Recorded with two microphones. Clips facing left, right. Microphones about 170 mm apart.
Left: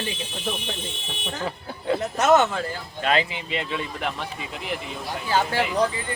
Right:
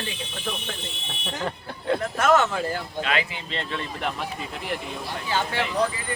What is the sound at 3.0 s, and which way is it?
Speech, 35° left (ahead or behind).